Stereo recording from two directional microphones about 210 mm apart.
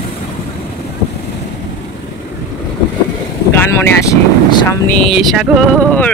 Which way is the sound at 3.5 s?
10° left (ahead or behind).